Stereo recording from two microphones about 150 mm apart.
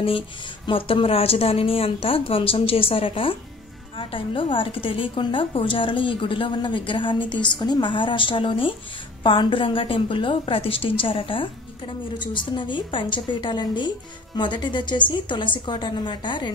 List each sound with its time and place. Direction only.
0.7 s a woman's voice: 35° left (ahead or behind)